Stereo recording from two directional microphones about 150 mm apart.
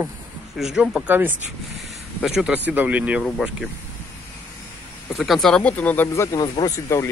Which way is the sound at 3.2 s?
Centre (ahead or behind).